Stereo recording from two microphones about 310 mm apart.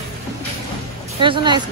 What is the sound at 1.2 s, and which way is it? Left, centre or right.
Speech, centre.